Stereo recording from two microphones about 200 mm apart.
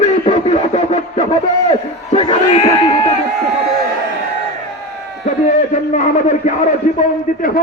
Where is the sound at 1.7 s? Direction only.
30° left (ahead or behind).